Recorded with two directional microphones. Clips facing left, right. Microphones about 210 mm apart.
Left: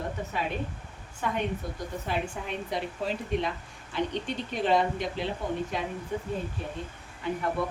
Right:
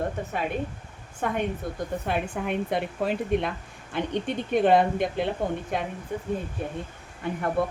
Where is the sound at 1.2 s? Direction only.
50° right (ahead or behind).